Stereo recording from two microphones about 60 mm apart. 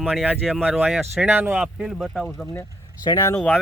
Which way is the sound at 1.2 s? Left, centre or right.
Centre.